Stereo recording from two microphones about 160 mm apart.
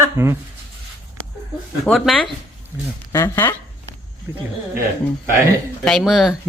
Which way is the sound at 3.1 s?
15° left (ahead or behind).